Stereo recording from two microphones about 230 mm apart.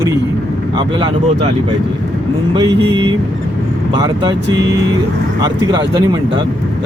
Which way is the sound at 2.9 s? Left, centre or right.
Centre.